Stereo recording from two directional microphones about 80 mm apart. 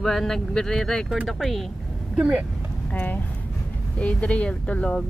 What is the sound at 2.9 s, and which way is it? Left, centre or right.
Speech, left.